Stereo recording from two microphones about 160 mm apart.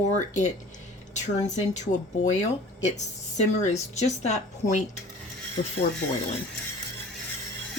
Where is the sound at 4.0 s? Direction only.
45° left (ahead or behind).